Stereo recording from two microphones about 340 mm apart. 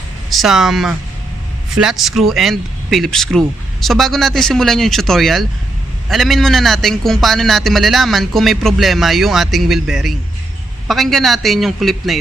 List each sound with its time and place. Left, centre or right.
0.3 s a man's voice: centre